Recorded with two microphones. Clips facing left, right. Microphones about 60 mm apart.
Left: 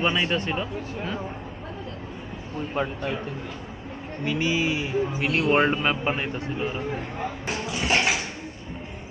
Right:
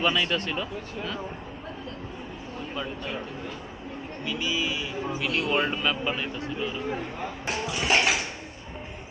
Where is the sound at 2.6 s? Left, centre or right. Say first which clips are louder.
Left 7 dB; left.